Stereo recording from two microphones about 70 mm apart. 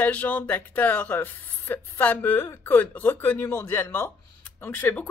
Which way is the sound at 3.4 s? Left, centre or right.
Left.